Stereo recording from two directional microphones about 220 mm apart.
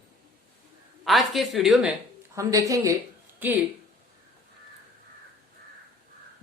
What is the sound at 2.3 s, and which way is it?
Speech, 15° right (ahead or behind).